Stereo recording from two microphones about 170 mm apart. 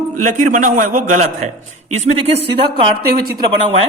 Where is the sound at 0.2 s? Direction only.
50° right (ahead or behind).